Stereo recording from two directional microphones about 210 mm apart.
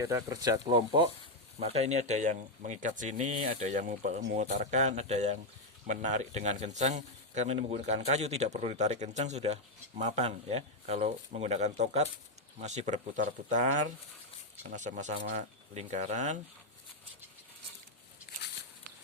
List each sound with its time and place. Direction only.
0.0 s speech: 15° right (ahead or behind); by 16.4 s 35° right (ahead or behind)